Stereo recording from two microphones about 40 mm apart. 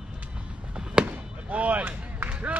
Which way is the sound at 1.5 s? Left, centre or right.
Right.